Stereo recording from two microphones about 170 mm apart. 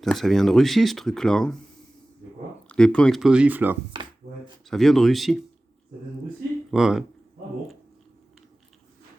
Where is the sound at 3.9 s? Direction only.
30° right (ahead or behind).